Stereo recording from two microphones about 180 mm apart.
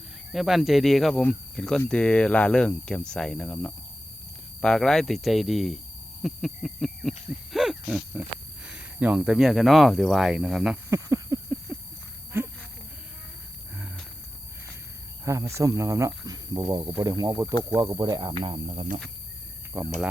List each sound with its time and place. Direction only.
0.3 s cricket: centre (ahead or behind)
6.2 s owl: centre (ahead or behind)
7.5 s a sound: centre (ahead or behind)
8.6 s cricket: 5° right (ahead or behind)
10.9 s a sound: 15° right (ahead or behind)
11.7 s livestock: 5° right (ahead or behind)
12.3 s a sound: 10° right (ahead or behind)
15.2 s speech: 15° right (ahead or behind)
18.4 s speech: 30° right (ahead or behind)
19.7 s speech: 15° right (ahead or behind)